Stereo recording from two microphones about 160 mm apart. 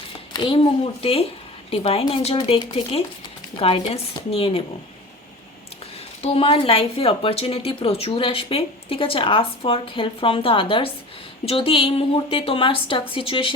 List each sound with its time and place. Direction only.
0.3 s speech: 35° left (ahead or behind)
6.2 s speech: 35° left (ahead or behind)